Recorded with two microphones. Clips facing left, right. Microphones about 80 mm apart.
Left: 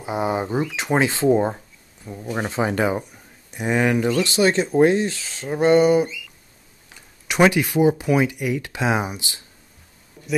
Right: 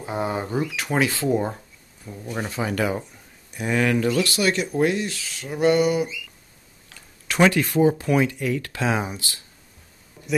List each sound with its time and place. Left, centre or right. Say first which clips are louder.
0.0 s speech: left 3 dB; centre
6.9 s a sound: left 1 dB; centre
7.9 s speech: left 2 dB; centre